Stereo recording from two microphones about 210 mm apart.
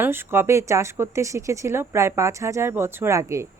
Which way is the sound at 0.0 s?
10° right (ahead or behind).